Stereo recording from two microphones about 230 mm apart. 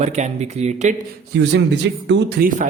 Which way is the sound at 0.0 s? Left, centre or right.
Right.